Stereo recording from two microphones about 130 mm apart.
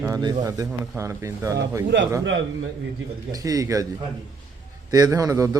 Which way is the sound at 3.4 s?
25° right (ahead or behind).